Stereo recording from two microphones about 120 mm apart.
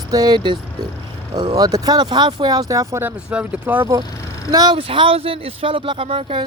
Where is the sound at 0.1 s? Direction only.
35° right (ahead or behind); by 3.8 s 10° right (ahead or behind).